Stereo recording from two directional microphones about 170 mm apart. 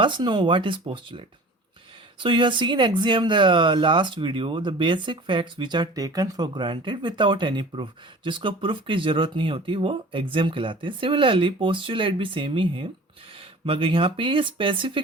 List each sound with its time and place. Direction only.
0.0 s speech: 25° right (ahead or behind)